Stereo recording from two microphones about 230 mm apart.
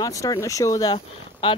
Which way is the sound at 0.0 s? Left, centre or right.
Centre.